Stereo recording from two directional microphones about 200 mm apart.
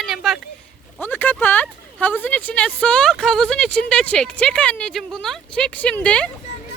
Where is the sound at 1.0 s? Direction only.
10° left (ahead or behind).